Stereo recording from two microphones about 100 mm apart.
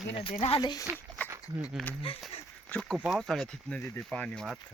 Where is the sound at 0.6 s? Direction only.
40° left (ahead or behind).